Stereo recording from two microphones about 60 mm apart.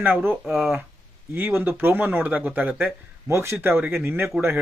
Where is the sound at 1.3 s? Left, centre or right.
Right.